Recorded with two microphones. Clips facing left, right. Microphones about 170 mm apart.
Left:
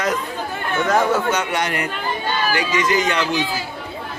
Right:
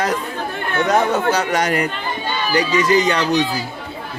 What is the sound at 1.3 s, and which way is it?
Speech, 40° right (ahead or behind).